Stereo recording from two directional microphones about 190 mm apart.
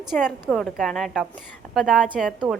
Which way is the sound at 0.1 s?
5° right (ahead or behind).